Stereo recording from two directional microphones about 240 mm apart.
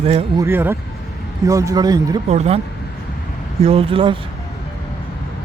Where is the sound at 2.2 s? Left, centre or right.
Right.